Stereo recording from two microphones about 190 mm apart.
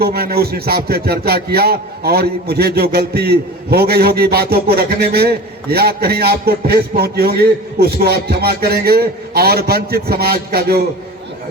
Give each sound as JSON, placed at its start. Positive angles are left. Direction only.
{"t": 0.0, "sound": "speech", "side_deg": -55}